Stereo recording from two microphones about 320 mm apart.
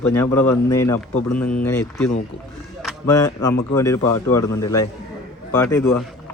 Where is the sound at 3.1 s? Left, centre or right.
Centre.